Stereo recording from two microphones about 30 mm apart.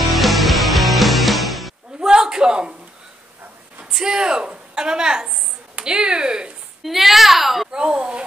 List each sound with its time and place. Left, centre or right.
0.1 s music: centre
2.0 s a sound: right
4.0 s a woman's voice: right
6.8 s a child's voice: centre
7.7 s a woman's voice: right